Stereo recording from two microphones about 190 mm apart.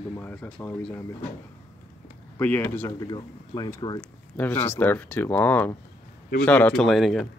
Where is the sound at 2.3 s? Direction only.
10° left (ahead or behind).